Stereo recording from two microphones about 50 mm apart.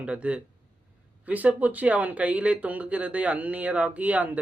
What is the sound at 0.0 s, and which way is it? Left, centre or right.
Speech, right.